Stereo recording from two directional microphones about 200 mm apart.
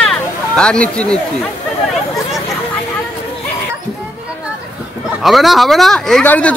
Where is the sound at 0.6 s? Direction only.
5° left (ahead or behind).